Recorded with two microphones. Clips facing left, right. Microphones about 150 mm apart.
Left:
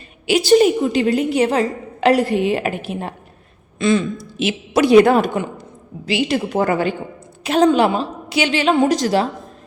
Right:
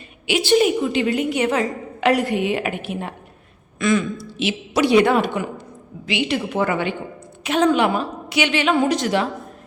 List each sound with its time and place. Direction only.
0.3 s a woman's voice: 40° left (ahead or behind)
4.2 s a woman's voice: 45° left (ahead or behind)